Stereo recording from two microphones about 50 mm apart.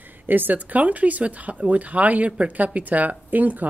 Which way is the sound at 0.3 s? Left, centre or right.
Right.